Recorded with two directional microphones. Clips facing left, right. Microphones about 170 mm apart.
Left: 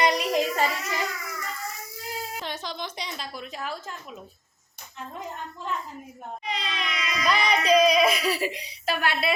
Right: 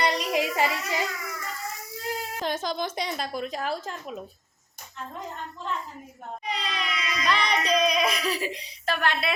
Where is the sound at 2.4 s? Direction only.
45° right (ahead or behind).